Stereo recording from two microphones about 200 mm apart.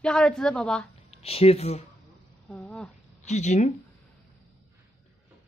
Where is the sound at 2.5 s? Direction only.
5° left (ahead or behind).